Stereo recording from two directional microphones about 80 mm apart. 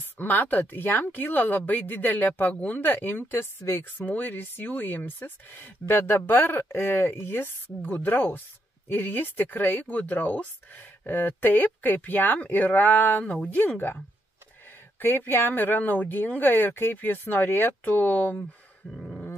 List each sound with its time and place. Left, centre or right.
0.2 s speech: left
4.0 s speech: centre
18.9 s roar: centre